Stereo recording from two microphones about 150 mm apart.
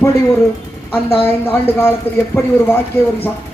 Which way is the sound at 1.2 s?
15° left (ahead or behind).